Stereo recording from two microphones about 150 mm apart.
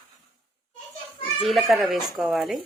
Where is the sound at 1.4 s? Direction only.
Centre (ahead or behind).